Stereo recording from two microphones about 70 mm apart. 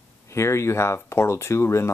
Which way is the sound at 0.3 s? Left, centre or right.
Left.